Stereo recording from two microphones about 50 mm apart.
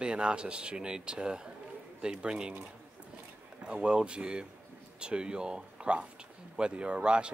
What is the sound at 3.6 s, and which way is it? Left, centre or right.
Speech, right.